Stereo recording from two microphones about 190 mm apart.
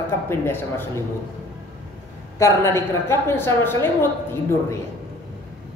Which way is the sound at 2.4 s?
15° left (ahead or behind).